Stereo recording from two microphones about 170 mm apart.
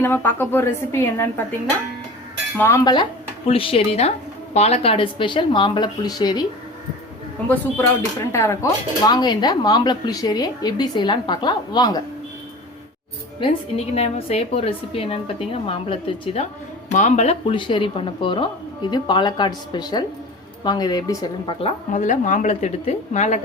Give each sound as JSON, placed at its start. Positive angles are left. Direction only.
{"t": 0.0, "sound": "a woman's voice", "side_deg": 15}
{"t": 2.6, "sound": "speech", "side_deg": 15}
{"t": 7.4, "sound": "speech", "side_deg": 10}
{"t": 13.7, "sound": "speech", "side_deg": 40}
{"t": 16.9, "sound": "speech", "side_deg": 45}